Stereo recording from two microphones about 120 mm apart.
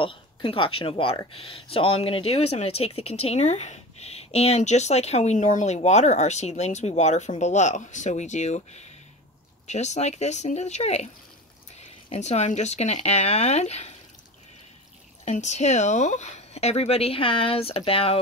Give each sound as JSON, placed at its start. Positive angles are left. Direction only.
{"t": 0.0, "sound": "speech", "side_deg": 45}
{"t": 5.8, "sound": "speech", "side_deg": 70}
{"t": 12.1, "sound": "speech", "side_deg": 70}
{"t": 15.2, "sound": "speech", "side_deg": 70}